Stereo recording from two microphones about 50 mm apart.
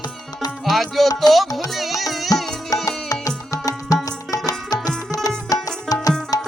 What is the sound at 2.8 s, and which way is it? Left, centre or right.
Music, left.